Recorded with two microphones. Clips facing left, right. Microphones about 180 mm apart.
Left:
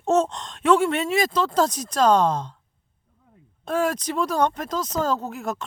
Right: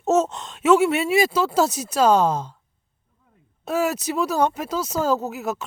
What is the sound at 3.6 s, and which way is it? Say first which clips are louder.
Speech: right 1 dB; 5° right (ahead or behind).